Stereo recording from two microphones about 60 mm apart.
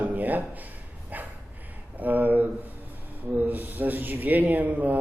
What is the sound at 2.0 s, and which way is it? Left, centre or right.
Speech, right.